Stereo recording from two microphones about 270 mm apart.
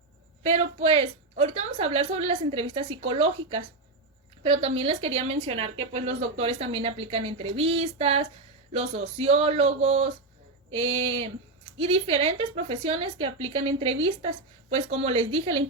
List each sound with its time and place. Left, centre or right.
0.4 s speech: right